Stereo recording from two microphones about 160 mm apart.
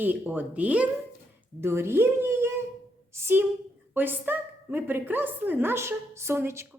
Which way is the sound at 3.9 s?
10° right (ahead or behind).